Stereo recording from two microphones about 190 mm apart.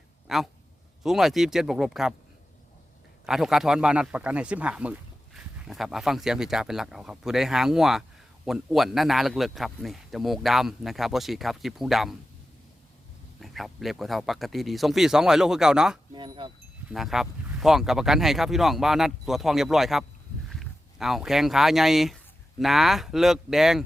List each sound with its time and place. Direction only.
0.3 s speech: centre (ahead or behind)
3.2 s speech: centre (ahead or behind)
13.4 s speech: centre (ahead or behind)
16.1 s speech: 25° right (ahead or behind)
16.9 s speech: centre (ahead or behind)